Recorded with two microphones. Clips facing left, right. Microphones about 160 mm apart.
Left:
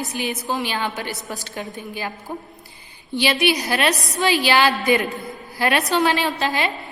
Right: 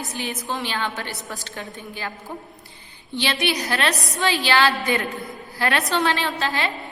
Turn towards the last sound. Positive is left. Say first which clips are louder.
# left 3 dB
turn(degrees=15)  # may be behind; listen again after turning